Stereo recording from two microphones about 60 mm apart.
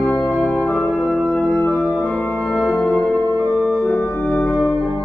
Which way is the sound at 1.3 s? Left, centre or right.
Centre.